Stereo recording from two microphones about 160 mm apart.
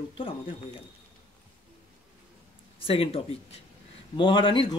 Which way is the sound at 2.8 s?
35° left (ahead or behind).